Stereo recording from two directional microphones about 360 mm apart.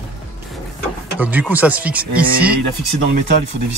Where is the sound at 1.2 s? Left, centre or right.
Centre.